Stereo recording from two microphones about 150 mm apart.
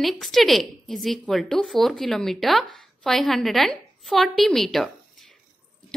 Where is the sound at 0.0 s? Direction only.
Centre (ahead or behind).